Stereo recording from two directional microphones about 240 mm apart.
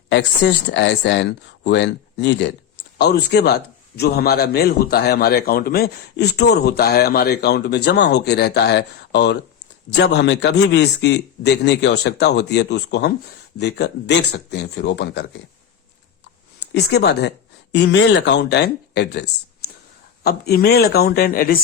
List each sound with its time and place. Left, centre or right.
0.1 s a man's voice: left
16.7 s a man's voice: left